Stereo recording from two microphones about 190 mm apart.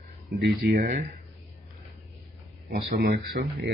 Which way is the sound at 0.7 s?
45° right (ahead or behind).